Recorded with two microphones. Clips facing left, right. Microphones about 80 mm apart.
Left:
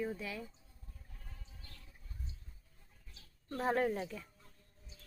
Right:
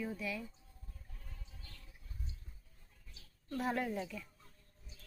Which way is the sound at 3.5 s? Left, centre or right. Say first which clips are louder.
Left 4 dB; left.